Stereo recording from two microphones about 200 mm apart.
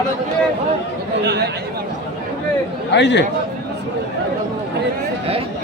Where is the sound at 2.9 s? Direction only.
60° left (ahead or behind).